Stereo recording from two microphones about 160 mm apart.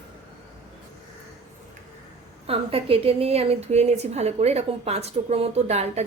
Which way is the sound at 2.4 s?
35° right (ahead or behind).